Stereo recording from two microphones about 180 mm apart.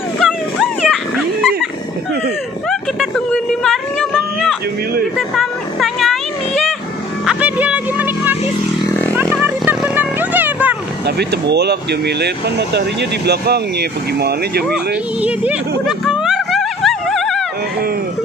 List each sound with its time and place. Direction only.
0.2 s dog: centre (ahead or behind)
2.7 s a sound: centre (ahead or behind)
7.2 s music: 5° right (ahead or behind)
11.1 s speech: 65° right (ahead or behind)
16.1 s music: centre (ahead or behind)